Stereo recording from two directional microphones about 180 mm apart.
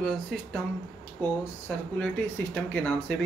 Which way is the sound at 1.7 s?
5° left (ahead or behind).